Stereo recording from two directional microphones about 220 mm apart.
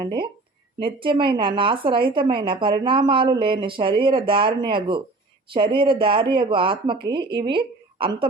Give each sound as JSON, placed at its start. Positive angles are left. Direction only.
{"t": 0.8, "sound": "a woman's voice", "side_deg": -25}